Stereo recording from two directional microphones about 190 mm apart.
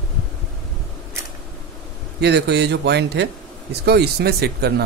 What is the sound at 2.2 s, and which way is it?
A man's voice, 60° right (ahead or behind).